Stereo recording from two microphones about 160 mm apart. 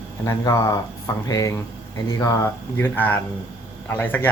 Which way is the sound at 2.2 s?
20° left (ahead or behind).